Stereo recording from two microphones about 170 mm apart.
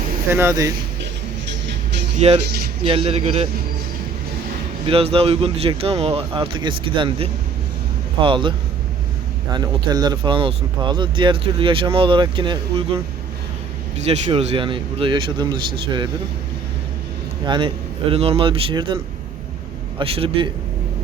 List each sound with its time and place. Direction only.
0.3 s speech: 15° right (ahead or behind)
2.1 s speech: 35° right (ahead or behind)
4.9 s speech: 35° right (ahead or behind)
14.1 s speech: 35° right (ahead or behind)
17.4 s speech: 25° right (ahead or behind)
20.0 s speech: 30° right (ahead or behind)